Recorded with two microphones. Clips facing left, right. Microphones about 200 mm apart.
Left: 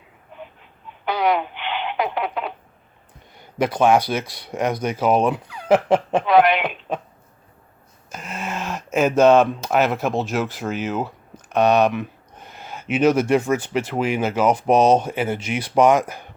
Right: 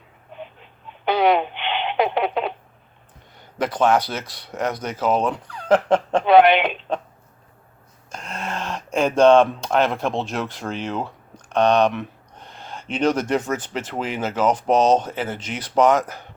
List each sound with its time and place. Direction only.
0.3 s a sound: 25° right (ahead or behind)
3.3 s speech: 10° left (ahead or behind)
6.2 s speech: 25° right (ahead or behind)
8.1 s speech: 5° left (ahead or behind)